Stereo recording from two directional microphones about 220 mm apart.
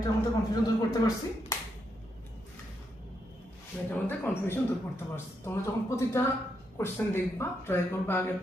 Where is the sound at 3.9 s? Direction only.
10° left (ahead or behind).